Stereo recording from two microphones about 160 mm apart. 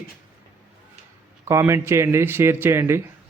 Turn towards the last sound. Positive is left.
turn(degrees=-15)  # may be behind; listen again after turning